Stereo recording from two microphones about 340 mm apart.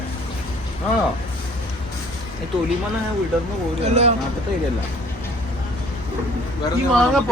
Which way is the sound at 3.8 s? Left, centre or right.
Centre.